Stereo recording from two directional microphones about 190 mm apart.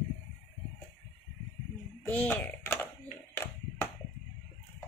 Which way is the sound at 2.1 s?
10° left (ahead or behind).